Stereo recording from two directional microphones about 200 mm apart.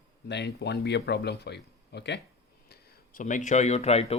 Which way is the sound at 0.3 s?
60° left (ahead or behind).